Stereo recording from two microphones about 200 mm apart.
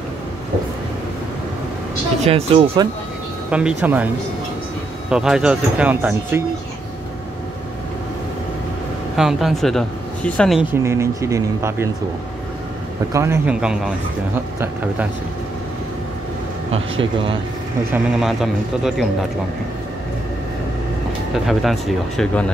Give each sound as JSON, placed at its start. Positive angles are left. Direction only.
{"t": 2.2, "sound": "speech", "side_deg": -30}
{"t": 3.4, "sound": "a man's voice", "side_deg": -5}
{"t": 5.1, "sound": "speech", "side_deg": -5}
{"t": 9.1, "sound": "speech", "side_deg": 0}
{"t": 10.7, "sound": "a man's voice", "side_deg": -15}
{"t": 13.1, "sound": "a man's voice", "side_deg": -15}
{"t": 17.0, "sound": "speech", "side_deg": -25}
{"t": 17.9, "sound": "speech", "side_deg": 0}
{"t": 21.3, "sound": "speech", "side_deg": 0}